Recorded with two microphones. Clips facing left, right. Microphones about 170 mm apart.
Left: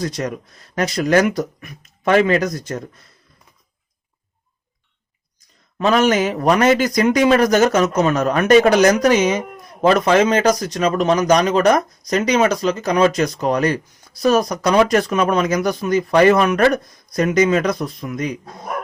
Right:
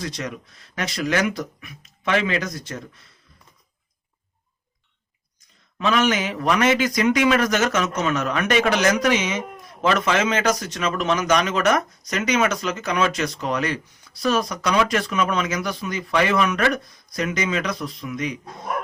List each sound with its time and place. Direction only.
0.0 s speech: 45° left (ahead or behind)
5.7 s a man's voice: 40° left (ahead or behind)